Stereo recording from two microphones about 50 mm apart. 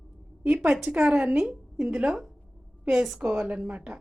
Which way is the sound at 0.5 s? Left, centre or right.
Centre.